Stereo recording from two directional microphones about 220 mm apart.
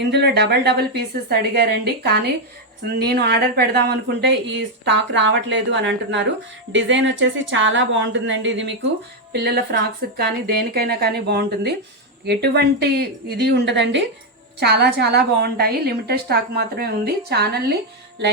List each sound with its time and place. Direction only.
0.0 s a woman's voice: 50° right (ahead or behind)